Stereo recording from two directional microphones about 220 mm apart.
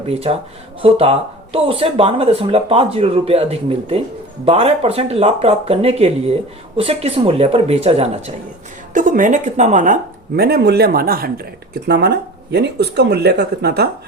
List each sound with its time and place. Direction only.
0.0 s speech: 30° right (ahead or behind); by 13.9 s 45° right (ahead or behind)